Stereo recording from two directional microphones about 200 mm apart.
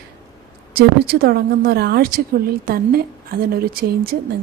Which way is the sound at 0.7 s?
50° right (ahead or behind).